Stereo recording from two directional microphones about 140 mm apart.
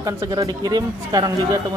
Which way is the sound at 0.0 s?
25° right (ahead or behind).